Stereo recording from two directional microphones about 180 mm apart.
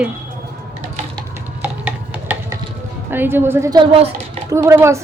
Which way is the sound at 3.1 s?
10° right (ahead or behind).